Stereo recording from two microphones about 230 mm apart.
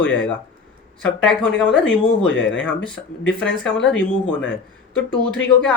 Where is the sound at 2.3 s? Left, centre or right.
Left.